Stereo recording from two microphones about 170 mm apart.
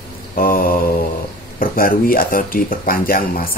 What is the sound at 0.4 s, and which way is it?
Speech, 55° left (ahead or behind).